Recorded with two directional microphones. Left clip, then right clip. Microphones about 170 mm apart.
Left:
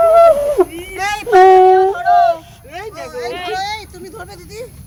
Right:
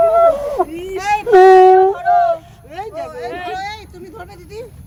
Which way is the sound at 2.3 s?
85° right.